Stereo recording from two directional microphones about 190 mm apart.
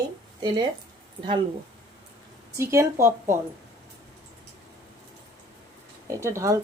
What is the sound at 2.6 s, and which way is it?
Speech, 15° right (ahead or behind).